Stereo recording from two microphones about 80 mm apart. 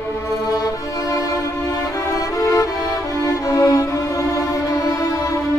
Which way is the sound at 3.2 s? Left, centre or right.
Left.